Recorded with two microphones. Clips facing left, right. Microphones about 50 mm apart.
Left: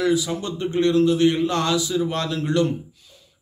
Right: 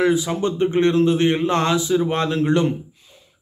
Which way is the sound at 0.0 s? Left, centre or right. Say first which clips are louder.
Right 3 dB; right.